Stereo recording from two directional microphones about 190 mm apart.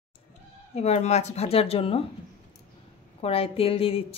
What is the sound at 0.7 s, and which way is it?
Speech, 35° left (ahead or behind).